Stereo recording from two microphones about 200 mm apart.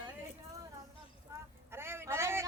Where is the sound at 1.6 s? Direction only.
10° right (ahead or behind).